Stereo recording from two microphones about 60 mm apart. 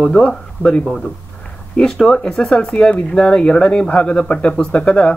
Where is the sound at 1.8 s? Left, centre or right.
Centre.